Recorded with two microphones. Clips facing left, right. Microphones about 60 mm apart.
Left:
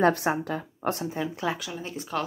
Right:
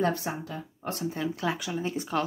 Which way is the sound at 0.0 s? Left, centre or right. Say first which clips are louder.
Left 6 dB; left.